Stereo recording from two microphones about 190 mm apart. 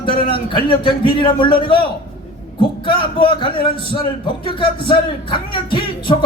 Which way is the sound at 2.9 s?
25° left (ahead or behind).